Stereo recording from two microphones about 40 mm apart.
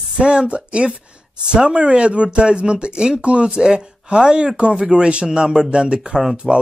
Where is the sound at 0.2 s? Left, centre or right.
Right.